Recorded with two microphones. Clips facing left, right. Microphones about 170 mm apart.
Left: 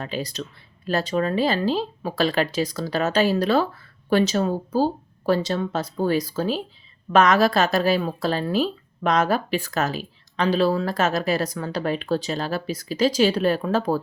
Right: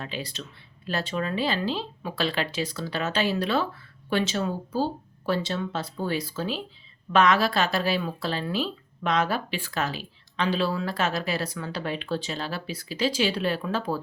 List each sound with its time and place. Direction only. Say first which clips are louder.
0.0 s a woman's voice: left 6 dB; 40° left (ahead or behind)